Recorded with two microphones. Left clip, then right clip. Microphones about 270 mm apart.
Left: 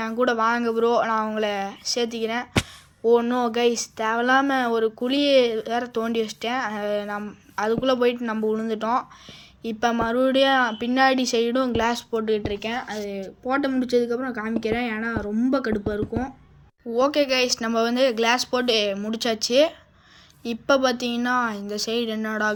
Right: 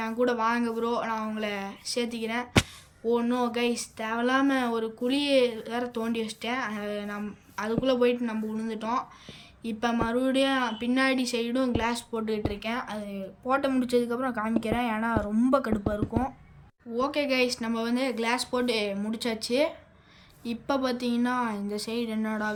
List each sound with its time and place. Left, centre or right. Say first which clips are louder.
0.0 s speech: left 5 dB; centre
13.1 s speech: left 2 dB; centre
16.9 s speech: left 7 dB; centre